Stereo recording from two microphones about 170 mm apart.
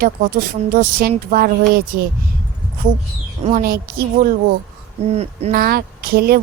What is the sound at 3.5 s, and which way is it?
Speech, 60° right (ahead or behind).